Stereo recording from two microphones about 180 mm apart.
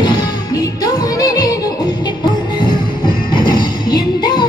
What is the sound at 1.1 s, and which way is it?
Music, 20° left (ahead or behind).